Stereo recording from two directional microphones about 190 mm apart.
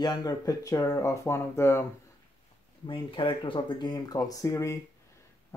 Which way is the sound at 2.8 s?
30° left (ahead or behind).